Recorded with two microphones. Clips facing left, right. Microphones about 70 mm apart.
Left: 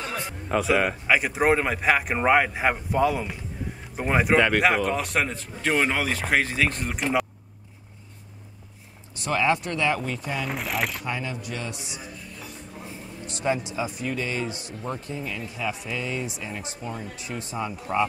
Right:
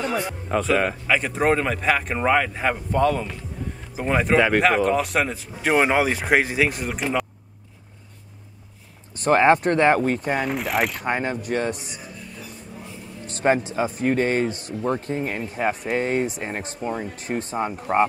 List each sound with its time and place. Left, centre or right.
0.5 s speech: centre
4.4 s speech: centre
5.7 s speech: centre
9.1 s speech: right
10.5 s speech: centre
11.0 s speech: right
13.3 s speech: right